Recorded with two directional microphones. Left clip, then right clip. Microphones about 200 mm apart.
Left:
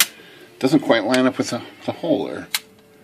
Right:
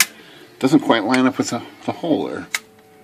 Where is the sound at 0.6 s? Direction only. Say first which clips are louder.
Right 1 dB; 15° right (ahead or behind).